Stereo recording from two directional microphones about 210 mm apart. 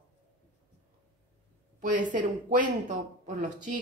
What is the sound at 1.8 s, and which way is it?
A woman's voice, 40° right (ahead or behind).